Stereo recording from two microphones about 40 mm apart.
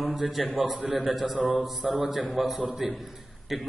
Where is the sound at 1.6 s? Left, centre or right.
Centre.